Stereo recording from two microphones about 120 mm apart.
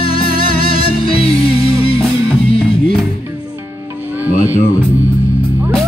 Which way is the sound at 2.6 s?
Centre (ahead or behind).